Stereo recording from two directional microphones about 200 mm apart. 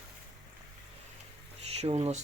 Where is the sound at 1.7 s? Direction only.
30° right (ahead or behind).